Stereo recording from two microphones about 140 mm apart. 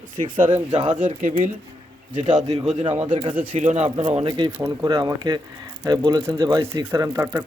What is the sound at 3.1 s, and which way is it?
Speech, 40° right (ahead or behind).